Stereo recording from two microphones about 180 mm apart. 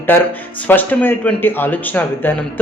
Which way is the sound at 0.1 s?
10° left (ahead or behind).